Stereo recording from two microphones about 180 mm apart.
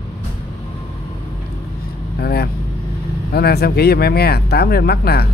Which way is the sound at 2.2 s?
60° left (ahead or behind).